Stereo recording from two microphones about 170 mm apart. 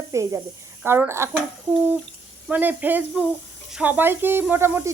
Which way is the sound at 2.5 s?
10° right (ahead or behind).